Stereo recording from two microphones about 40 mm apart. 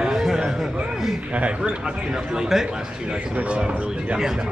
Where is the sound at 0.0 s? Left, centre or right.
Centre.